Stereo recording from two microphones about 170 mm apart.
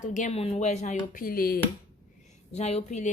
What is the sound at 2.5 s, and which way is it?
Speech, 40° left (ahead or behind).